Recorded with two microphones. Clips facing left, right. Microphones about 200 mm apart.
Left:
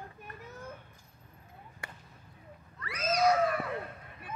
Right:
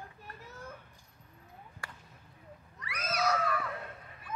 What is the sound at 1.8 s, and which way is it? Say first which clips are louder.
Basketball bounce: left 2 dB; 20° left (ahead or behind).